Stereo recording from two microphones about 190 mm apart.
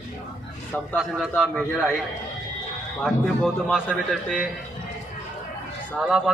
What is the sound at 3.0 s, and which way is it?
A man's voice, centre (ahead or behind).